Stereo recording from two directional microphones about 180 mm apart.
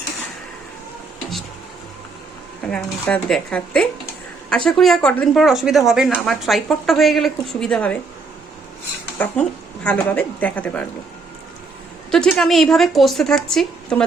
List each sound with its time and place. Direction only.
2.6 s speech: 5° left (ahead or behind)
9.1 s a woman's voice: 5° left (ahead or behind)
12.1 s speech: 5° left (ahead or behind)